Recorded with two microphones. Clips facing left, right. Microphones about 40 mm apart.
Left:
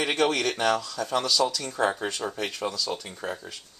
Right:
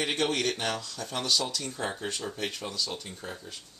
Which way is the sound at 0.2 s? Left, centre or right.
Left.